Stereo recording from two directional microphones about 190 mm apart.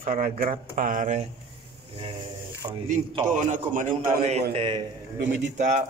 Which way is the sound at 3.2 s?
40° right (ahead or behind).